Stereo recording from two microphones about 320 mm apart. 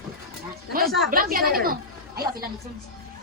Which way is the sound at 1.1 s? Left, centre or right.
Right.